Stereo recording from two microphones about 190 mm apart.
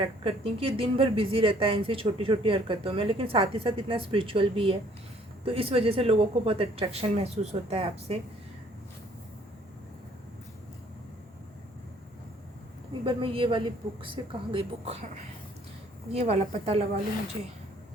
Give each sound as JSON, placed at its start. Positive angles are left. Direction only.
{"t": 0.0, "sound": "speech", "side_deg": -30}
{"t": 13.1, "sound": "speech", "side_deg": -25}
{"t": 16.1, "sound": "speech", "side_deg": -35}